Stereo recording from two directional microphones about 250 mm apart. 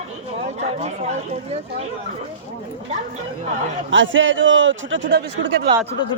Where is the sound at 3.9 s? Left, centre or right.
Right.